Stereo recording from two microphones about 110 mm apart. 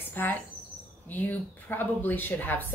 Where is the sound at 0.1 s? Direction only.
20° left (ahead or behind).